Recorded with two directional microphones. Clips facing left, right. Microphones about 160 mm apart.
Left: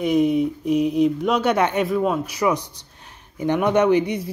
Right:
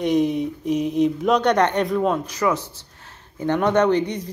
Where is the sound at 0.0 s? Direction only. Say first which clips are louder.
Left 2 dB; centre (ahead or behind).